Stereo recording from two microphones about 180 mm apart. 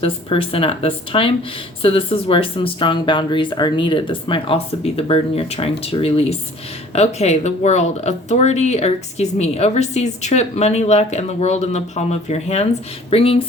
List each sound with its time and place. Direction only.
0.0 s speech: 30° left (ahead or behind)